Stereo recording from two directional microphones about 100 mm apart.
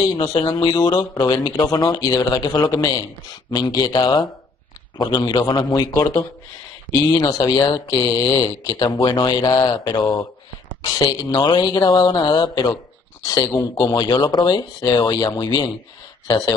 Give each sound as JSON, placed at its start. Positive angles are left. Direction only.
{"t": 0.3, "sound": "speech", "side_deg": 45}